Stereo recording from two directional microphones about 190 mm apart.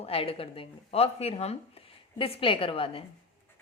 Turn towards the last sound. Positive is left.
turn(degrees=30)  # may be behind; listen again after turning